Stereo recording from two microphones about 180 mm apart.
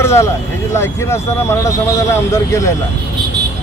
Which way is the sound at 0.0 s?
15° left (ahead or behind).